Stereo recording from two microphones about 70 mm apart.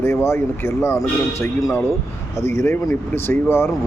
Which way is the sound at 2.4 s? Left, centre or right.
Left.